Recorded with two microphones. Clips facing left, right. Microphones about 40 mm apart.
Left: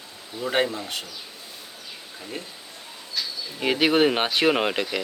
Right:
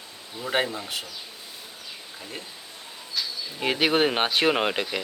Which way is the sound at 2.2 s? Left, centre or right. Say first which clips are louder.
Left 5 dB; centre.